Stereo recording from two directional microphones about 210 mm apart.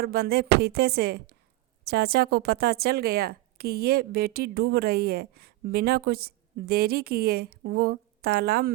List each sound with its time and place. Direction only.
0.0 s a woman's voice: 45° right (ahead or behind)